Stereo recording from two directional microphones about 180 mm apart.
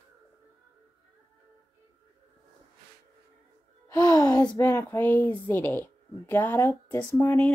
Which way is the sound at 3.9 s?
20° left (ahead or behind).